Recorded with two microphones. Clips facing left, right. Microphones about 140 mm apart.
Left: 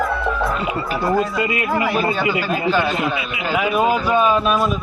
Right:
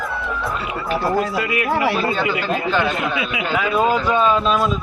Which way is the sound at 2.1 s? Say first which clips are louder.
Left 1 dB; 10° left (ahead or behind).